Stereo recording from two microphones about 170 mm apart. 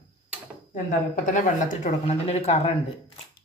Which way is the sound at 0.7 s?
50° left (ahead or behind).